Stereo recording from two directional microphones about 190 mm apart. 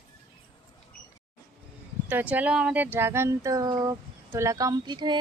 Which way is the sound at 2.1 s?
10° right (ahead or behind).